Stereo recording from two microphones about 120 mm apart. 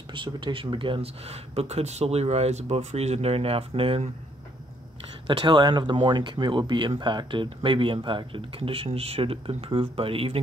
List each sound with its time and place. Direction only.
0.1 s speech: 45° right (ahead or behind)
5.2 s speech: 40° right (ahead or behind)